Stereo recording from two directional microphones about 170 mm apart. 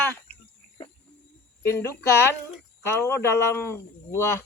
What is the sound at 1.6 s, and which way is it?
Speech, 15° left (ahead or behind).